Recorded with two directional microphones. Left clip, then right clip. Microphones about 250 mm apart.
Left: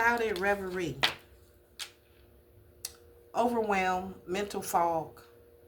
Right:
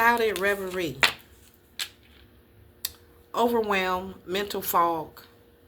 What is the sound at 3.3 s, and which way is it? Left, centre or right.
Speech, centre.